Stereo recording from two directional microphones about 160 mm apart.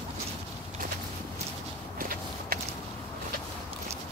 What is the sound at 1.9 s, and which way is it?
Walk, 65° right (ahead or behind).